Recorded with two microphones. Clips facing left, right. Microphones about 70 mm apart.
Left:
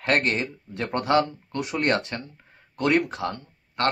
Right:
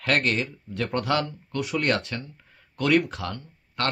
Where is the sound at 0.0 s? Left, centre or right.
Left.